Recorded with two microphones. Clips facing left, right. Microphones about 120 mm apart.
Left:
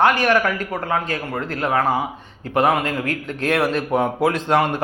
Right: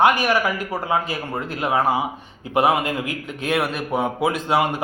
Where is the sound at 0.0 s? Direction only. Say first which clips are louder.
Left 1 dB; 15° right (ahead or behind).